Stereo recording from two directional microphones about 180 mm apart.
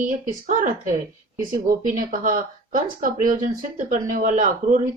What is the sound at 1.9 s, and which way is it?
Speech, 45° right (ahead or behind).